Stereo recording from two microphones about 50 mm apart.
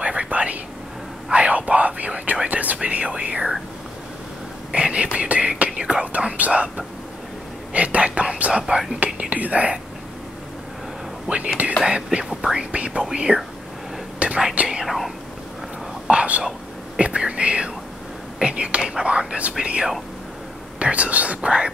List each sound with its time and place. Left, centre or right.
0.0 s whispering: right
4.7 s beatboxing: right
5.8 s whispering: right
7.7 s whispering: right
8.6 s whispering: centre
9.0 s whispering: right
11.2 s speech: right
12.2 s speech: centre
12.5 s speech: right
14.5 s speech: right
14.8 s speech: centre
16.1 s whispering: right
17.0 s speech: right